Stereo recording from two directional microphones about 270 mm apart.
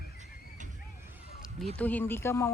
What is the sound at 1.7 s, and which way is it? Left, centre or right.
Speech, centre.